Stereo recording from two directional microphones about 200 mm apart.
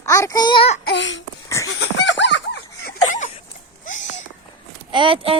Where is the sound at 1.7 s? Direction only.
80° left.